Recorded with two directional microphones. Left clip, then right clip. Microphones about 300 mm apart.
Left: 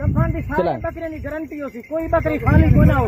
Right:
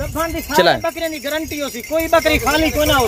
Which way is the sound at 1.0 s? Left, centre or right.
Right.